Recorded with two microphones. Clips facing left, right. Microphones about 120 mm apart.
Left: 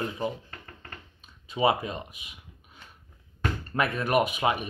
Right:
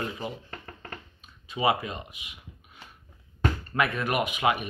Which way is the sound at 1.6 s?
40° left (ahead or behind).